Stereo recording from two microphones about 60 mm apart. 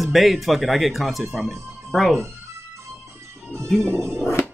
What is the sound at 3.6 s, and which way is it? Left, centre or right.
Speech, centre.